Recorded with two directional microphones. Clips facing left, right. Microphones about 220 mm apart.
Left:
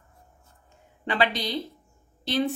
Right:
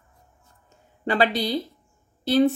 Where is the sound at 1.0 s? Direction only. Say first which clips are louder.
Right 4 dB; 40° right (ahead or behind).